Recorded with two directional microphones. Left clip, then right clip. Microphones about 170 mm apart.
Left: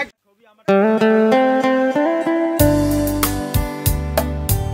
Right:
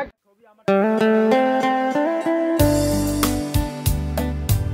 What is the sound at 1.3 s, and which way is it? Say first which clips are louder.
Music: left 3 dB; centre (ahead or behind).